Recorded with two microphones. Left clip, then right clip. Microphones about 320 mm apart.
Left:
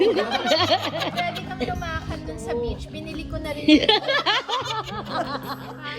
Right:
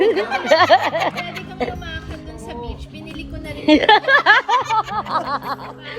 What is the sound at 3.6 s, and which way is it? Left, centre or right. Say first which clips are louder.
Speech: right 5 dB; centre.